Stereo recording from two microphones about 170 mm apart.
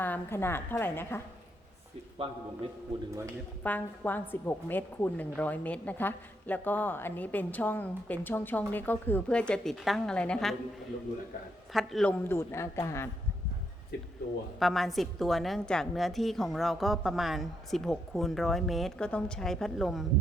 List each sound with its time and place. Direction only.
0.0 s a woman's voice: 10° left (ahead or behind)
2.2 s a man's voice: 35° right (ahead or behind)
3.6 s a woman's voice: 10° left (ahead or behind)
11.7 s a woman's voice: centre (ahead or behind)
12.3 s a woman's voice: 15° left (ahead or behind)
14.6 s a woman's voice: centre (ahead or behind)